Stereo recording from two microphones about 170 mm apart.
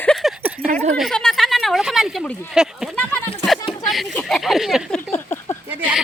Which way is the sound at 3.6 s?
20° left (ahead or behind).